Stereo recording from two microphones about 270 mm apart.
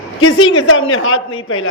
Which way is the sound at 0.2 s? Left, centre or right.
Left.